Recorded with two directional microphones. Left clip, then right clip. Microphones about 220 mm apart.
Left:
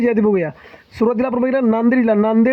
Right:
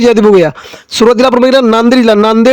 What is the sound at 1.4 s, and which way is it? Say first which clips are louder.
A man's voice: right 10 dB; 40° right (ahead or behind).